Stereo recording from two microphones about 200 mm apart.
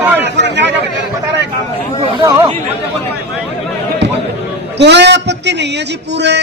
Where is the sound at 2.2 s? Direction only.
20° right (ahead or behind).